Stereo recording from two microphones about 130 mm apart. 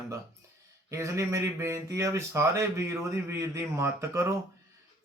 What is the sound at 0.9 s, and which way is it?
Speech, 20° right (ahead or behind).